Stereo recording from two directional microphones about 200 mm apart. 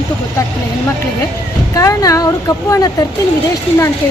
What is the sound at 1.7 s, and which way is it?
A woman's voice, 15° left (ahead or behind).